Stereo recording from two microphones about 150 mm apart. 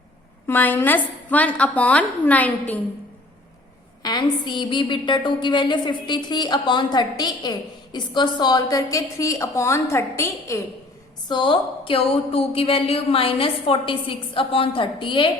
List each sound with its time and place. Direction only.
0.4 s a woman's voice: 15° left (ahead or behind)
4.0 s a woman's voice: 25° left (ahead or behind)
11.3 s a woman's voice: 30° left (ahead or behind)